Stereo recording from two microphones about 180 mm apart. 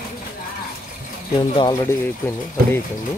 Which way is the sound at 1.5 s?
20° left (ahead or behind).